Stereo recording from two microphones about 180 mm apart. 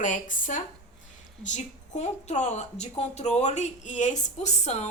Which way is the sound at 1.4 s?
40° left (ahead or behind).